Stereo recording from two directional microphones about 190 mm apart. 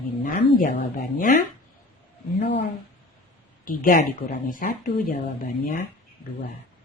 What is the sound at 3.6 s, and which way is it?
Speech, 45° left (ahead or behind).